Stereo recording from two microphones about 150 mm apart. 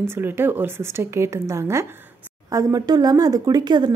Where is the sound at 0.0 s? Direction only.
15° right (ahead or behind).